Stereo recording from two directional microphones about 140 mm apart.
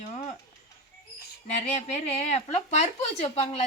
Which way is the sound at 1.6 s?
50° left (ahead or behind).